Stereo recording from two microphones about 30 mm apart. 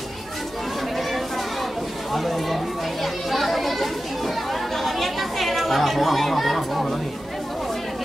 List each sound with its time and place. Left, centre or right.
2.1 s children playing: centre
4.5 s chatter: centre